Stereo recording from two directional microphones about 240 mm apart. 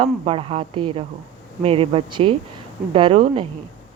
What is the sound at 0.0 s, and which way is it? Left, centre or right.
Speech, right.